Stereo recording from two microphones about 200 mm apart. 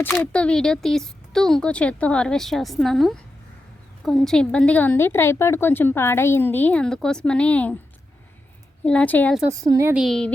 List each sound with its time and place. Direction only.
0.0 s a woman's voice: 5° left (ahead or behind)
8.8 s speech: 5° left (ahead or behind)
9.5 s a woman's voice: 15° right (ahead or behind)
9.9 s speech: centre (ahead or behind)